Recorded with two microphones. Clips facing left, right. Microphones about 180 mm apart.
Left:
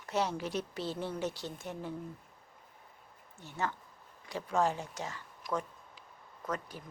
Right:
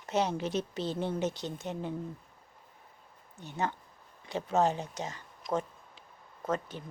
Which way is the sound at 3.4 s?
20° right (ahead or behind).